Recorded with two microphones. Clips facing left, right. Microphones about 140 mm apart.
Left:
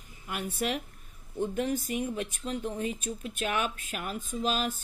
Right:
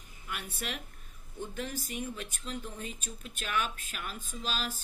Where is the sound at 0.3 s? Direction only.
45° left (ahead or behind).